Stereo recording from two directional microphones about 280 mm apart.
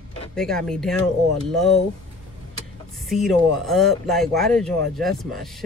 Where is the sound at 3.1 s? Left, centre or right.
Centre.